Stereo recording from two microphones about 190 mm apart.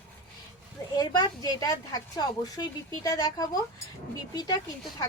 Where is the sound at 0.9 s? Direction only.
20° left (ahead or behind).